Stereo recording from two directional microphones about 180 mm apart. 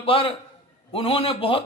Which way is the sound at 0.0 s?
30° left (ahead or behind).